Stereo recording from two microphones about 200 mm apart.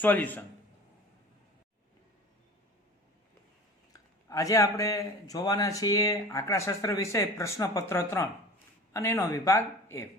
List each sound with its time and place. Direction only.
0.0 s a man's voice: 10° left (ahead or behind)
3.9 s a man's voice: 15° left (ahead or behind)